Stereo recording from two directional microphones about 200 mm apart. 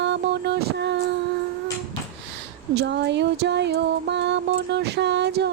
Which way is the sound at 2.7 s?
55° right (ahead or behind).